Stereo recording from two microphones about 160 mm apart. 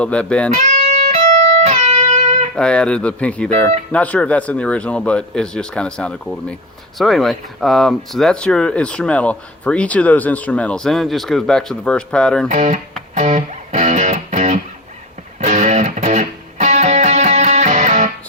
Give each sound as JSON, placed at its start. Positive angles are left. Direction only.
{"t": 0.0, "sound": "speech", "side_deg": 5}
{"t": 0.5, "sound": "music", "side_deg": -45}
{"t": 2.6, "sound": "speech", "side_deg": 5}
{"t": 12.5, "sound": "speech", "side_deg": -50}
{"t": 13.1, "sound": "music", "side_deg": -45}